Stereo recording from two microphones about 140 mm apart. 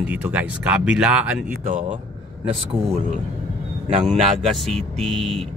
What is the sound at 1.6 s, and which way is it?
Speech, 65° right (ahead or behind).